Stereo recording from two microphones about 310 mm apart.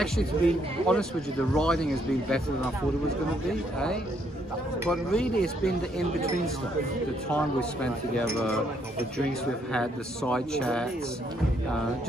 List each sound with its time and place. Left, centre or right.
0.0 s speech: centre
4.8 s speech: centre
7.3 s speech: centre
9.7 s speech: centre